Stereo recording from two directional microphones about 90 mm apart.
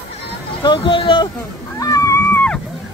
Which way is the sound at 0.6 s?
60° left (ahead or behind).